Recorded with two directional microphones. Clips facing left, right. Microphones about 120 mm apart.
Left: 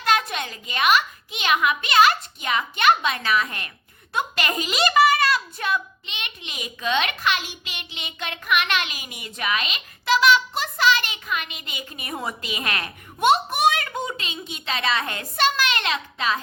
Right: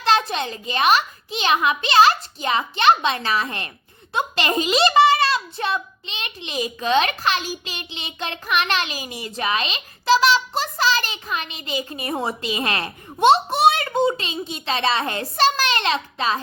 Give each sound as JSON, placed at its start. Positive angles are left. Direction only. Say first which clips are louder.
{"t": 0.0, "sound": "a child's voice", "louder": "right 3 dB", "side_deg": -30}